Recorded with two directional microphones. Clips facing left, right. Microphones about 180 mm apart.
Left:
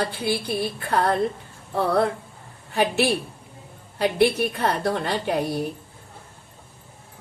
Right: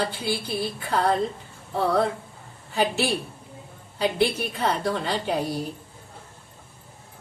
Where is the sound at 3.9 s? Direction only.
60° left (ahead or behind).